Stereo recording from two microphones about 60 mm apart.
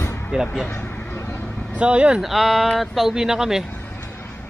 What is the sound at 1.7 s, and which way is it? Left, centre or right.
Speech, centre.